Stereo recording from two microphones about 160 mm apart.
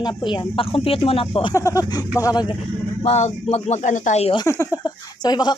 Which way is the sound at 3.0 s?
45° left (ahead or behind).